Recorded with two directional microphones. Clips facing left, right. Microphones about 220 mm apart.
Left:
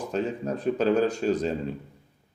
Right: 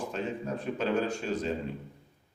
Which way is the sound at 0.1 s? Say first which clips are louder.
Left 5 dB; 40° left (ahead or behind).